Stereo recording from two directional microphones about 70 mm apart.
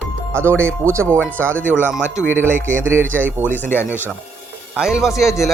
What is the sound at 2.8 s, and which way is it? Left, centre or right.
Speech, right.